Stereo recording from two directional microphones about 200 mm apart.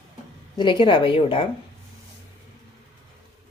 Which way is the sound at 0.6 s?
25° left (ahead or behind).